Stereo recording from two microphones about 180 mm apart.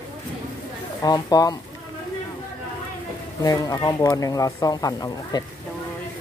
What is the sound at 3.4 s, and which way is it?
Speech, 20° left (ahead or behind).